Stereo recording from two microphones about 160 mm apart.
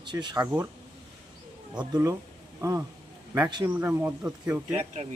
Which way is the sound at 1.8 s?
20° right (ahead or behind).